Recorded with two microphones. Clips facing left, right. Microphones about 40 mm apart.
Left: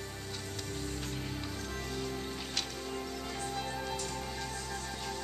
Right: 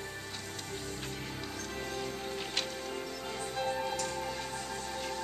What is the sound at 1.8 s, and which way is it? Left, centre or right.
Music, centre.